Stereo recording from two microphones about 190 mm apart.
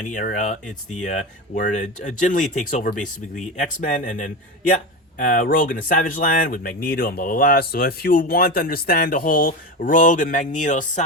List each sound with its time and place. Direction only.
0.0 s speech: 40° left (ahead or behind)